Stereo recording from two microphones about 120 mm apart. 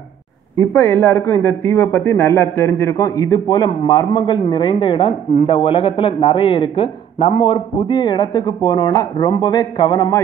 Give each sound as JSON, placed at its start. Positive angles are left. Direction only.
{"t": 0.6, "sound": "a man's voice", "side_deg": 15}